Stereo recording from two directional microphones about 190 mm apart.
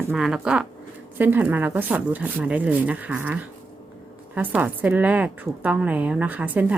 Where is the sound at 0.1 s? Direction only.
5° right (ahead or behind).